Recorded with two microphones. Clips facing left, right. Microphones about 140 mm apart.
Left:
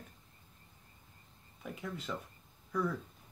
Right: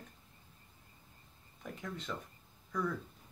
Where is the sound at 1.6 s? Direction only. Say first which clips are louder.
Left 1 dB; 5° left (ahead or behind).